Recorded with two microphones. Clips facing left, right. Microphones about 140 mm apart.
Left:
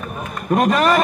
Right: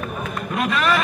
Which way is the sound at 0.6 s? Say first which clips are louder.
Left 5 dB; 45° left (ahead or behind).